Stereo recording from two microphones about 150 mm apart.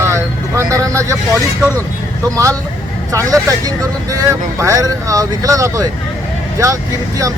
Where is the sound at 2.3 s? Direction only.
20° right (ahead or behind).